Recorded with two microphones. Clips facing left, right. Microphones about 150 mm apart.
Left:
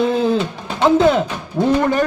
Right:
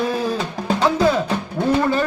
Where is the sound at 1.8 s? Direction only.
20° left (ahead or behind).